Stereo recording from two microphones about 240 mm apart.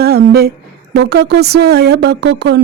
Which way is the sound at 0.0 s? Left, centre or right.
Right.